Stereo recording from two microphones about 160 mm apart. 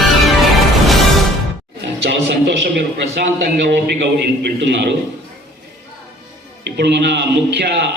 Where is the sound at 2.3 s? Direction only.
90° right.